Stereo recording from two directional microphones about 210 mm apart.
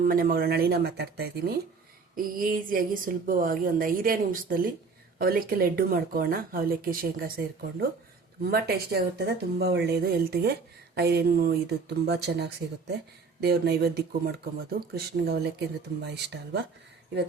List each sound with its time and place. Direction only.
0.0 s a woman's voice: 40° right (ahead or behind)